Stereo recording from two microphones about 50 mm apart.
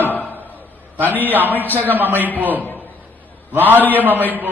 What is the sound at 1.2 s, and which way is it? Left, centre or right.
Speech, right.